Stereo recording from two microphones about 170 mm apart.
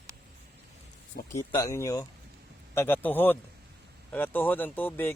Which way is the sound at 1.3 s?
20° left (ahead or behind).